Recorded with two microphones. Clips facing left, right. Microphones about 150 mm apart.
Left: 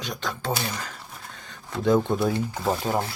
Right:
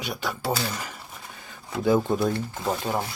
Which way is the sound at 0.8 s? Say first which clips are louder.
Even; 10° right (ahead or behind).